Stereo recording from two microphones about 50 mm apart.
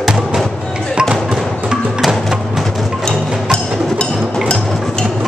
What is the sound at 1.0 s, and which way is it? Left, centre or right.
Music, centre.